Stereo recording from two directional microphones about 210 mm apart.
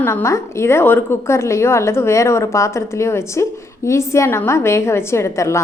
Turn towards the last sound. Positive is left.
turn(degrees=15)  # may be behind; listen again after turning